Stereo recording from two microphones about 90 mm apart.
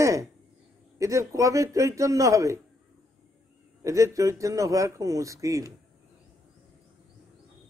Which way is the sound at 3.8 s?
35° right (ahead or behind).